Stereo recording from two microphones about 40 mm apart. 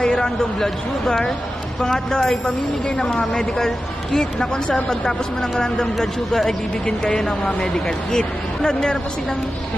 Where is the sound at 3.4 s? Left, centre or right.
Centre.